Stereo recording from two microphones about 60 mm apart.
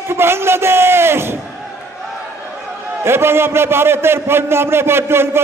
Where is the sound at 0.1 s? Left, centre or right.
Right.